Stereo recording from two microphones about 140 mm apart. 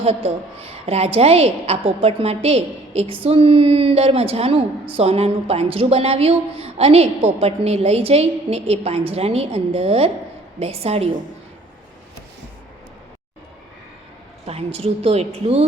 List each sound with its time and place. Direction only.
0.0 s a woman's voice: 45° right (ahead or behind)
14.4 s a woman's voice: 45° right (ahead or behind)